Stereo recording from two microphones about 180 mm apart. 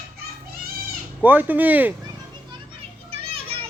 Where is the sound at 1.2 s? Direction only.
10° right (ahead or behind).